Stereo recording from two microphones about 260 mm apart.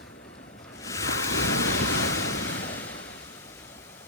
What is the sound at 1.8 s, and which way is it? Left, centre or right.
Waves, left.